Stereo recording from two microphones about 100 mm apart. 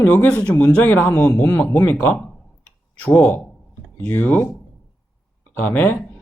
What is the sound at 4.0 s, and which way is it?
Speech, 15° left (ahead or behind).